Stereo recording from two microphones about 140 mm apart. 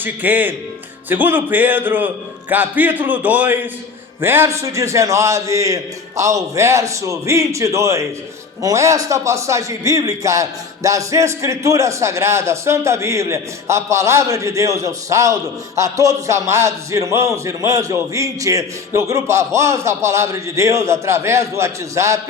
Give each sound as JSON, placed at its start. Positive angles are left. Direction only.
{"t": 0.0, "sound": "a man's voice", "side_deg": -10}